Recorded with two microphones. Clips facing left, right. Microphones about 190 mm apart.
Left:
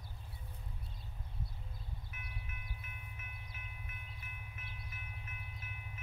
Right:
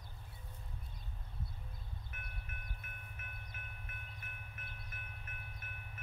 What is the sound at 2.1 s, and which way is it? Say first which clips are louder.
Train: left 2 dB; 55° right (ahead or behind).